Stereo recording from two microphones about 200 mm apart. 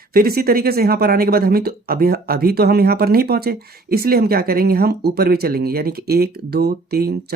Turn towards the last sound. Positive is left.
turn(degrees=-50)  # may be behind; listen again after turning